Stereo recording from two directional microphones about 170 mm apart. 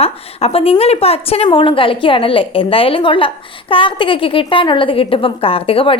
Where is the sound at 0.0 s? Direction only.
35° left (ahead or behind).